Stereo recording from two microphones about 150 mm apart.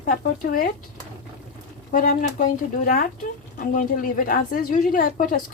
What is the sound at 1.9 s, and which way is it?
A woman's voice, 65° left (ahead or behind).